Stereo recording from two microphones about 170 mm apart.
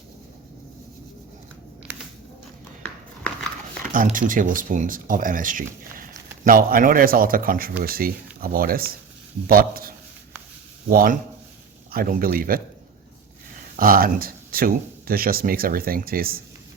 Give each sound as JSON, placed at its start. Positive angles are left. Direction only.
{"t": 3.9, "sound": "speech", "side_deg": -50}
{"t": 13.7, "sound": "speech", "side_deg": -55}